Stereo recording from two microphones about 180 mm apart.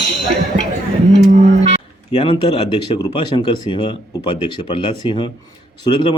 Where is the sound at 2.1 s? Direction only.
30° left (ahead or behind).